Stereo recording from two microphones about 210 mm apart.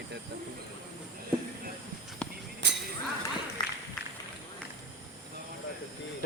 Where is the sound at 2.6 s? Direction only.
55° right (ahead or behind).